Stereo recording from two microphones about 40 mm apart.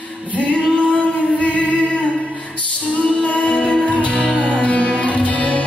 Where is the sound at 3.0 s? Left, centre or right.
Left.